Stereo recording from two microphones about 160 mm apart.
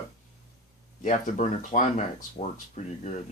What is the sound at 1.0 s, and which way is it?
Speech, 45° left (ahead or behind).